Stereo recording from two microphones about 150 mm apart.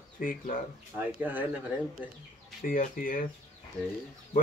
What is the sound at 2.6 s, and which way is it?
Speech, 65° left (ahead or behind).